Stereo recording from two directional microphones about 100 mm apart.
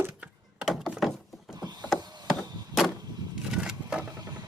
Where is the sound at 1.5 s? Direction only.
45° right (ahead or behind).